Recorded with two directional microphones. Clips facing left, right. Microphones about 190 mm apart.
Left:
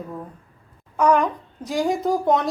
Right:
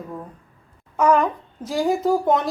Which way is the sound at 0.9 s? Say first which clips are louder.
Even; 5° right (ahead or behind).